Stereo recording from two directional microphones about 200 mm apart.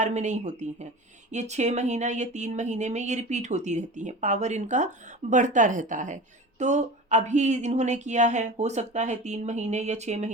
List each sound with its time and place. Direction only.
0.0 s speech: 35° right (ahead or behind)